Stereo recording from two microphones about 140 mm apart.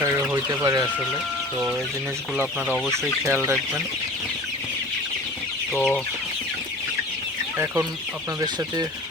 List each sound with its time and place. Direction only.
0.0 s emergency vehicle: 20° right (ahead or behind)
2.6 s speech: 5° left (ahead or behind)
3.2 s speech: 20° right (ahead or behind)
5.7 s chicken: 10° left (ahead or behind)
8.4 s speech: 30° right (ahead or behind)